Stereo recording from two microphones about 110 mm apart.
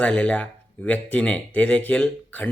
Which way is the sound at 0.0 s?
10° left (ahead or behind).